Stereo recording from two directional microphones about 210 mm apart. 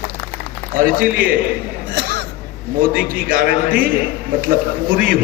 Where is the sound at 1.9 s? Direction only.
55° right (ahead or behind).